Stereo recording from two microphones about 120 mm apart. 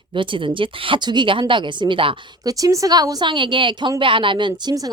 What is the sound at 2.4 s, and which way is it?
A woman's voice, 30° right (ahead or behind).